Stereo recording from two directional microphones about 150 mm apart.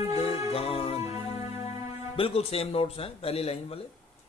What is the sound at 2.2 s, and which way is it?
A man's voice, 40° left (ahead or behind).